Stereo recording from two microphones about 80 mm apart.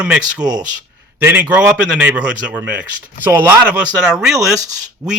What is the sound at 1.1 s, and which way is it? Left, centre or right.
A man's voice, right.